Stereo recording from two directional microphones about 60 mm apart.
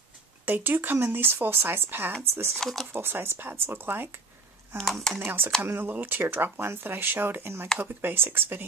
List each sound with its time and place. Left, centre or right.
0.5 s speech: right
2.6 s speech: centre
2.9 s speech: right
4.7 s speech: centre
5.2 s speech: right